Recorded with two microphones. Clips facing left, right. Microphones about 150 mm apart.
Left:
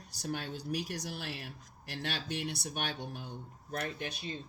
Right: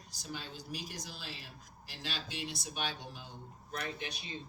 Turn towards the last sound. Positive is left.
turn(degrees=45)  # may be behind; listen again after turning